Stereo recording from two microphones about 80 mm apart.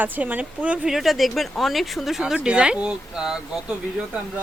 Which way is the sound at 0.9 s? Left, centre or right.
Centre.